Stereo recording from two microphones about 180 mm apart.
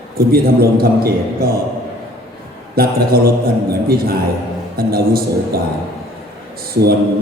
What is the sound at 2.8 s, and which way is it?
A man's voice, 55° right (ahead or behind).